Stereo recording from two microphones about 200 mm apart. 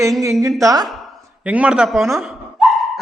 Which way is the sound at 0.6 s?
20° right (ahead or behind).